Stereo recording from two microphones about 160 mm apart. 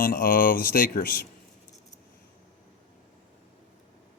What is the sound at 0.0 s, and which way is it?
Speech, 60° left (ahead or behind).